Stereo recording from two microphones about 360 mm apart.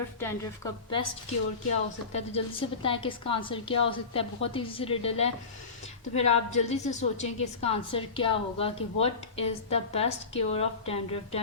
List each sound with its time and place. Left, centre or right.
0.2 s a woman's voice: centre
2.1 s a woman's voice: centre